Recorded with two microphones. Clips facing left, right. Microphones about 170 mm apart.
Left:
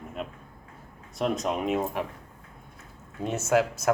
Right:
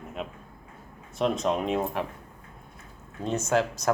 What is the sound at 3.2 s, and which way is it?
Speech, 5° left (ahead or behind).